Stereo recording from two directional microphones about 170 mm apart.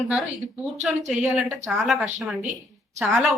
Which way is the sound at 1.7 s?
Centre (ahead or behind).